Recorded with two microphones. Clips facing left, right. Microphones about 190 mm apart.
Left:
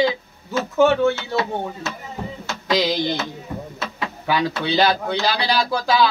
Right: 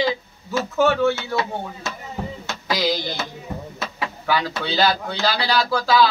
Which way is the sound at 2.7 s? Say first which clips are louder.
Left 3 dB; 20° left (ahead or behind).